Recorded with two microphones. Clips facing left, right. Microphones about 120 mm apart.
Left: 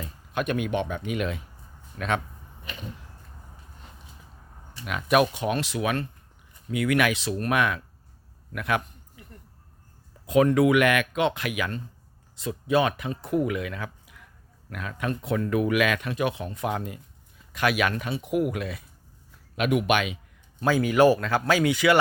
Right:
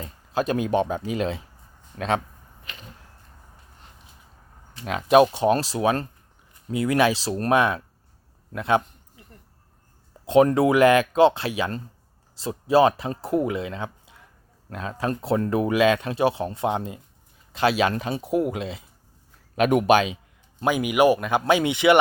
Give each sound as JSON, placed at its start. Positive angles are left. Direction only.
{"t": 0.0, "sound": "speech", "side_deg": -30}
{"t": 4.8, "sound": "speech", "side_deg": -30}
{"t": 8.5, "sound": "a sound", "side_deg": -25}
{"t": 10.2, "sound": "speech", "side_deg": -30}
{"t": 19.5, "sound": "speech", "side_deg": -40}
{"t": 20.7, "sound": "speech", "side_deg": -15}